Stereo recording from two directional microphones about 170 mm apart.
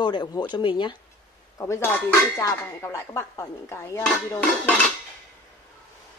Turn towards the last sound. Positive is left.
turn(degrees=5)  # may be behind; listen again after turning